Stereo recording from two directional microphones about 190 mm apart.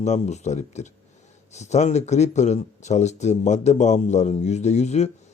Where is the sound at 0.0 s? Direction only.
35° left (ahead or behind).